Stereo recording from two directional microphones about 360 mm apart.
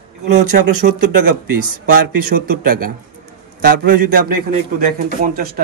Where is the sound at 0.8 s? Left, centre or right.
Right.